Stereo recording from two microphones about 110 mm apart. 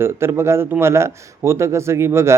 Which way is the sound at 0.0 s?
25° right (ahead or behind).